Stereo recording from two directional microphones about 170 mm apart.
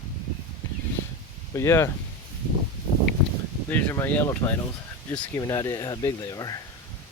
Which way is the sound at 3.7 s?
15° left (ahead or behind).